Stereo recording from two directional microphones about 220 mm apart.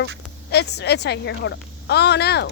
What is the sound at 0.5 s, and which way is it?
Speech, 50° left (ahead or behind).